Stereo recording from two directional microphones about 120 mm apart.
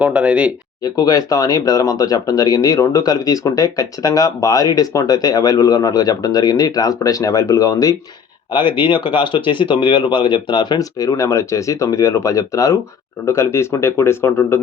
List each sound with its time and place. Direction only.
0.0 s speech: 10° right (ahead or behind)
0.8 s speech: 30° left (ahead or behind)
8.5 s speech: 40° left (ahead or behind); by 14.6 s 20° left (ahead or behind)